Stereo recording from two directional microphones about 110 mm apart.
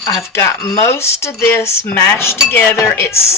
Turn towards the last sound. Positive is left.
turn(degrees=25)  # may be behind; listen again after turning